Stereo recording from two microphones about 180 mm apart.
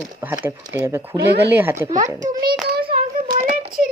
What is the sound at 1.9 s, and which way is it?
Speech, 45° right (ahead or behind).